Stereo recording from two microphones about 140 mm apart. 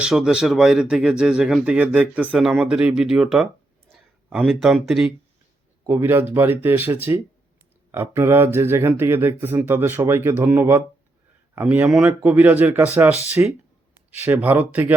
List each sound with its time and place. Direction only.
0.0 s speech: 5° right (ahead or behind)
5.9 s speech: 15° right (ahead or behind)